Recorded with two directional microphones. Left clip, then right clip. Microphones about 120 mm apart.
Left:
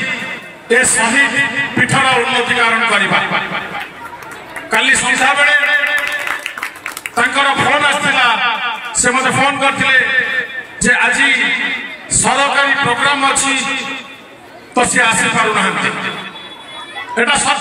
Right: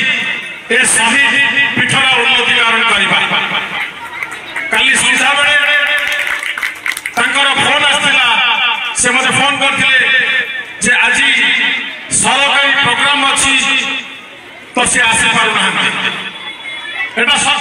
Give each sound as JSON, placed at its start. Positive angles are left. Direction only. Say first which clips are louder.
{"t": 0.7, "sound": "a man's voice", "louder": "right 1 dB", "side_deg": -30}
{"t": 4.6, "sound": "a man's voice", "louder": "right 2 dB", "side_deg": -25}
{"t": 7.2, "sound": "a man's voice", "louder": "right 1 dB", "side_deg": -30}